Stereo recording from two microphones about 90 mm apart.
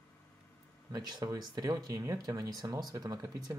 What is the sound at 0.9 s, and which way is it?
Speech, 50° right (ahead or behind).